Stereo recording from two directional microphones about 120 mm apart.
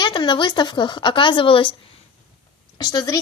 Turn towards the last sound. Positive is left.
turn(degrees=30)  # may be behind; listen again after turning